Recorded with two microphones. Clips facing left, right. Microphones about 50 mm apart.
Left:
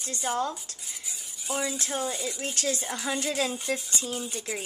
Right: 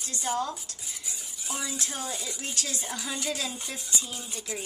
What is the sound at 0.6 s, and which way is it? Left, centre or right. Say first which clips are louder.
Cutlery: even; centre.